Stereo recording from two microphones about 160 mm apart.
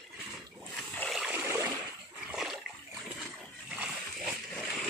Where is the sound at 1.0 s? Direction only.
5° right (ahead or behind).